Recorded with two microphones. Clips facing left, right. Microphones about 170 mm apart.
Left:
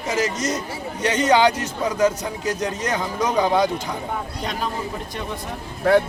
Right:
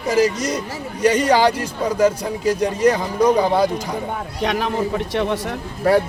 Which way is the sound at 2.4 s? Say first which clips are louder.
Right 8 dB; 10° right (ahead or behind).